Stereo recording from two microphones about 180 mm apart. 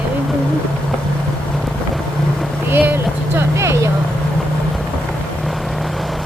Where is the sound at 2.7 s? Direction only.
10° right (ahead or behind).